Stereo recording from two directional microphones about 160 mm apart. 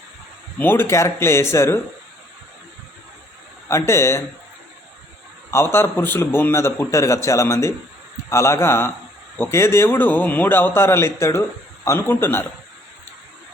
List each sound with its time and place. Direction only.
0.6 s a man's voice: 15° left (ahead or behind)
3.7 s a man's voice: 15° left (ahead or behind)
5.5 s a man's voice: 15° left (ahead or behind)